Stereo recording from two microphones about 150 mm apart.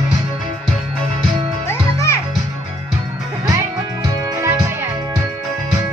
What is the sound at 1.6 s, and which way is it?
Music, 20° left (ahead or behind).